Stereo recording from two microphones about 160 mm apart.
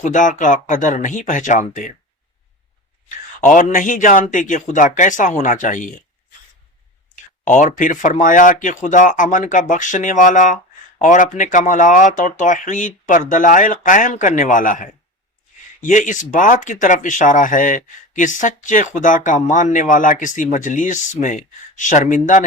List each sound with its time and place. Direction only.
0.0 s speech: 55° left (ahead or behind)
3.4 s speech: 55° left (ahead or behind)
7.4 s speech: 50° left (ahead or behind)